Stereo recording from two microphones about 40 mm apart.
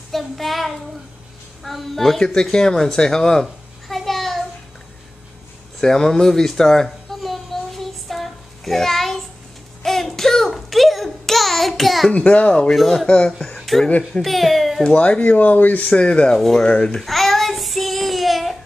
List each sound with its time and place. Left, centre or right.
0.1 s child singing: centre
2.5 s babbling: centre
5.8 s a sound: centre
12.1 s speech: left
13.6 s a sound: centre
14.2 s speech: centre
14.8 s speech: left
15.9 s speech: left
16.9 s child singing: centre